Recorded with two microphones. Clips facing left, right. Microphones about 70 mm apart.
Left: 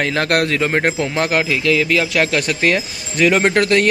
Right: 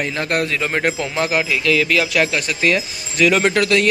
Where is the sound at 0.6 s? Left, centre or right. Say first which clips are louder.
Left 3 dB; left.